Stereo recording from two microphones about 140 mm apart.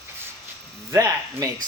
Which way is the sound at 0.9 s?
25° right (ahead or behind).